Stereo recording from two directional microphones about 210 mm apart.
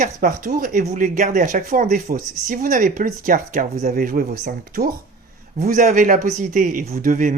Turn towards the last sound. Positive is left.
turn(degrees=-40)  # may be behind; listen again after turning